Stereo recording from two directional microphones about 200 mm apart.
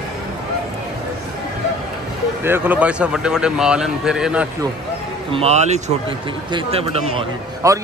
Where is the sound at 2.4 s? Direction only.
10° right (ahead or behind).